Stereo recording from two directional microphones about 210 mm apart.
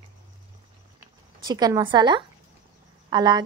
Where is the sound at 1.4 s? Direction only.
20° right (ahead or behind).